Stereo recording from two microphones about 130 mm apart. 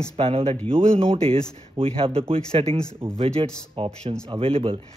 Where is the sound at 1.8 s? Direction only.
45° right (ahead or behind).